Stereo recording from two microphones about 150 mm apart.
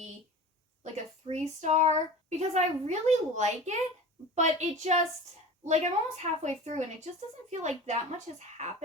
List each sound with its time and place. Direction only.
1.3 s child singing: 50° right (ahead or behind)
2.5 s a woman's voice: 50° right (ahead or behind)